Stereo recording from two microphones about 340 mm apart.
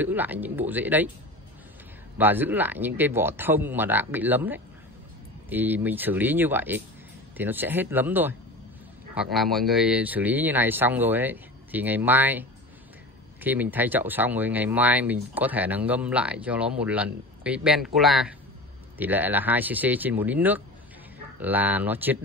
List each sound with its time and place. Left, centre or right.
0.0 s speech: centre
2.1 s speech: centre